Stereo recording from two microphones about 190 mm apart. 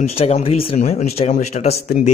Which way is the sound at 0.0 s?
35° left (ahead or behind).